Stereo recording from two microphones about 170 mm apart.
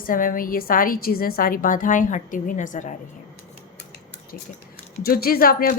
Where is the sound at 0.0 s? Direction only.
55° left (ahead or behind).